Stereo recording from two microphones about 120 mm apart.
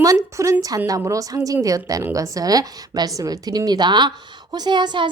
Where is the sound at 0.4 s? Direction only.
25° right (ahead or behind).